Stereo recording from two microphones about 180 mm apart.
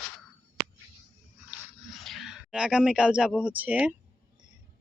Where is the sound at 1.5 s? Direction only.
Centre (ahead or behind).